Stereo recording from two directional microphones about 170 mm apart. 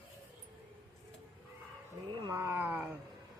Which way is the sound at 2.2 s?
20° right (ahead or behind).